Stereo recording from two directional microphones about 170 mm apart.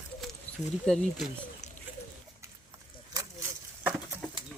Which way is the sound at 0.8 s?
Centre (ahead or behind).